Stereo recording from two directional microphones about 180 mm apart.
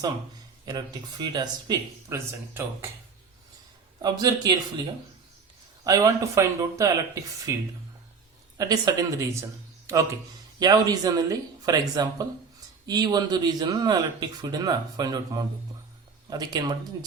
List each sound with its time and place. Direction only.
0.6 s speech: 25° right (ahead or behind)
4.0 s speech: 20° right (ahead or behind)
5.8 s speech: 20° right (ahead or behind)
8.5 s speech: 20° right (ahead or behind)